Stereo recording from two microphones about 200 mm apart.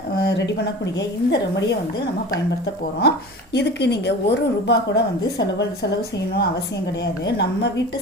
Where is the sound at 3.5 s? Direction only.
55° left (ahead or behind).